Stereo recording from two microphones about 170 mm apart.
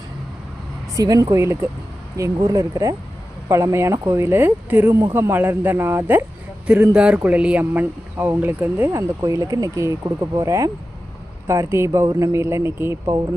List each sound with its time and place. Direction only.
0.9 s speech: 20° right (ahead or behind)